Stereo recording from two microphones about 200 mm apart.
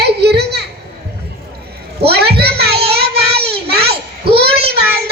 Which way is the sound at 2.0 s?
55° right (ahead or behind).